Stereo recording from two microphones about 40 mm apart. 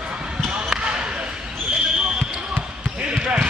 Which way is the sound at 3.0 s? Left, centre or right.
Right.